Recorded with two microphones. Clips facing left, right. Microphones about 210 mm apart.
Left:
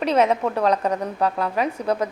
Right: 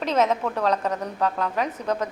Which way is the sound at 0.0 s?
10° left (ahead or behind).